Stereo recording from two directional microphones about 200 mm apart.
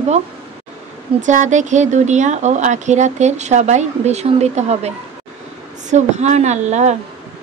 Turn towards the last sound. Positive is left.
turn(degrees=-35)  # may be behind; listen again after turning